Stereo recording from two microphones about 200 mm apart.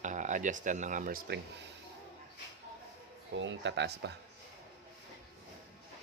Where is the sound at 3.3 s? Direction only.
65° right (ahead or behind).